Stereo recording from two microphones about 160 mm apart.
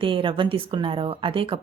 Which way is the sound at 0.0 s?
30° right (ahead or behind).